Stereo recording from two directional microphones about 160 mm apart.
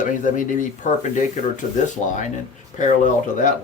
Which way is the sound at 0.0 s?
50° left (ahead or behind).